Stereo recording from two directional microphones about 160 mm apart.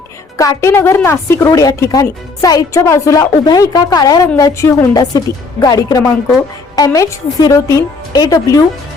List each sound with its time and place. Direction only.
0.3 s a woman's voice: 20° left (ahead or behind)